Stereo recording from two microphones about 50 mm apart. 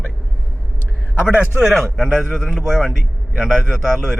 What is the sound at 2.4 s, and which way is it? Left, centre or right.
Speech, centre.